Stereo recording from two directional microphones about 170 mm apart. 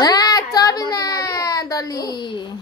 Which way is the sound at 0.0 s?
25° left (ahead or behind).